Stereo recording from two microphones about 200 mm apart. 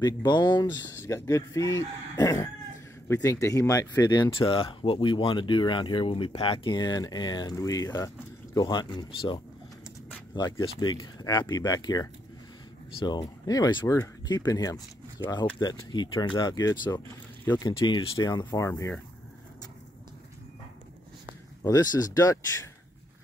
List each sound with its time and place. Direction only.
0.0 s speech: 20° left (ahead or behind)
21.6 s speech: 20° left (ahead or behind)